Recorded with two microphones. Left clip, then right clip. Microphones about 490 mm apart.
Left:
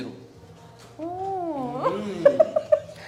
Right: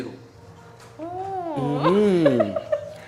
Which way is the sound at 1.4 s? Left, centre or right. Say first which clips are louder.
Right 7 dB; centre.